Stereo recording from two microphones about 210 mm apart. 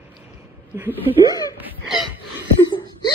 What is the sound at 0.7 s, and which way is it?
Speech, 10° right (ahead or behind).